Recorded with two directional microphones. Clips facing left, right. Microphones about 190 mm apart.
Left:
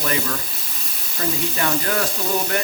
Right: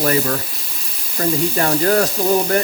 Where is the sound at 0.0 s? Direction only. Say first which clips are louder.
Right 7 dB; 40° right (ahead or behind).